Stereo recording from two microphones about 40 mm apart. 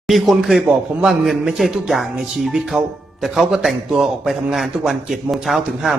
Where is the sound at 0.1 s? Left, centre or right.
Centre.